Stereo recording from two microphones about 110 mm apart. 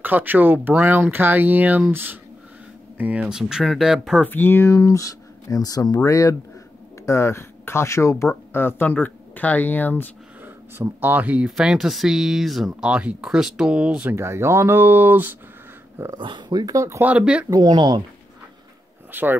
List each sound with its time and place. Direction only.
0.0 s speech: 15° right (ahead or behind)
4.2 s speech: 20° left (ahead or behind)
10.4 s speech: 15° right (ahead or behind)
14.1 s speech: 25° right (ahead or behind)
16.2 s speech: 45° right (ahead or behind); by 17.0 s 30° right (ahead or behind)
17.0 s speech: 10° right (ahead or behind)
17.5 s speech: 40° right (ahead or behind)
19.1 s speech: 15° right (ahead or behind)